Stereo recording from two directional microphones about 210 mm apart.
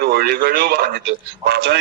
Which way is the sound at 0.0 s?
45° right (ahead or behind).